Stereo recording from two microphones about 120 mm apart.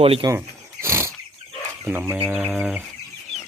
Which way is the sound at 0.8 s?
20° right (ahead or behind).